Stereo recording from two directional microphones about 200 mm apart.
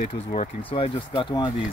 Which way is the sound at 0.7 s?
25° left (ahead or behind).